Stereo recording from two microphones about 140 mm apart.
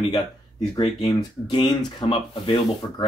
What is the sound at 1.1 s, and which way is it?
Speech, 30° left (ahead or behind).